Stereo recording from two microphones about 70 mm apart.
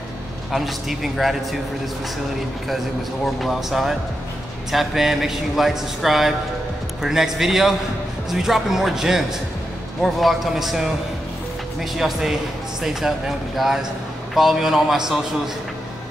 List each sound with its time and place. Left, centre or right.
0.5 s a man's voice: centre
3.3 s a man's voice: centre
14.3 s a man's voice: centre